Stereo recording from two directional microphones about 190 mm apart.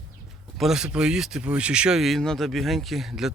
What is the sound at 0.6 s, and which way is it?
Speech, 5° right (ahead or behind).